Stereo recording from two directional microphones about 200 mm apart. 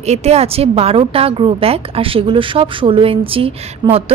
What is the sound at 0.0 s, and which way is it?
A woman's voice, 35° right (ahead or behind).